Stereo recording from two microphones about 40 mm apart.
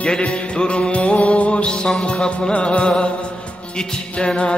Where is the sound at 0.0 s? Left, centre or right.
Left.